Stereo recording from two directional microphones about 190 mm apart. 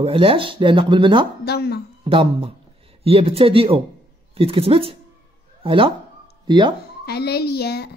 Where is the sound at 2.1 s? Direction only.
30° right (ahead or behind).